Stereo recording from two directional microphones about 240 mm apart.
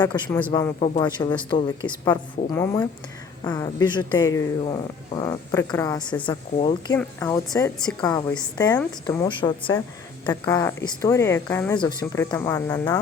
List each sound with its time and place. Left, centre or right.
0.1 s speech: centre
0.8 s speech: centre
6.9 s speech: centre